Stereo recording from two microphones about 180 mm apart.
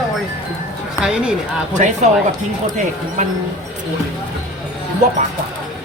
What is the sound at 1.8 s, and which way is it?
Speech, 45° right (ahead or behind).